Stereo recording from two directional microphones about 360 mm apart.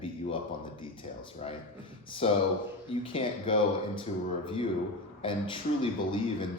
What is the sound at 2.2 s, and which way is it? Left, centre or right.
Speech, centre.